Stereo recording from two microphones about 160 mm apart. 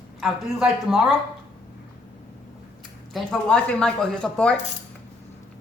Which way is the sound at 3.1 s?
5° left (ahead or behind).